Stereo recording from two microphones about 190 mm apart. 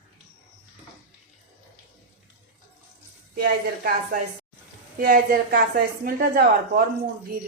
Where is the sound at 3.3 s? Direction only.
55° right (ahead or behind).